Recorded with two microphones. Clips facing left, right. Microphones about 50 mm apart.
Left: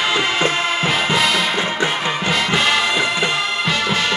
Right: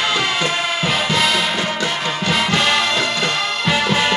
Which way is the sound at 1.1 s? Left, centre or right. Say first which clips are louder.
Even; centre.